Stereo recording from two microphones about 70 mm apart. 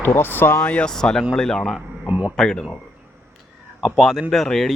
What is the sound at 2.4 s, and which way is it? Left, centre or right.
Speech, centre.